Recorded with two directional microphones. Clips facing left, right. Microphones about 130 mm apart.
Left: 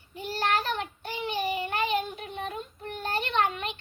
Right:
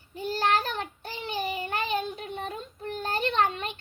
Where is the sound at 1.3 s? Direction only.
40° right (ahead or behind).